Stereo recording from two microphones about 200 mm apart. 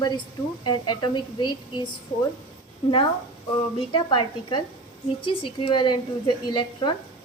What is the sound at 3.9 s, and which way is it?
Speech, 25° left (ahead or behind).